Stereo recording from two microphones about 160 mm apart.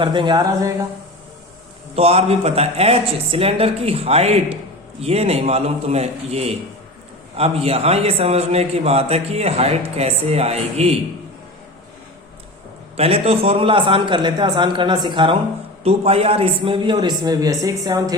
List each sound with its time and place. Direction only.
0.0 s speech: 30° right (ahead or behind)
2.0 s a man's voice: 40° right (ahead or behind)
13.0 s a man's voice: 40° right (ahead or behind)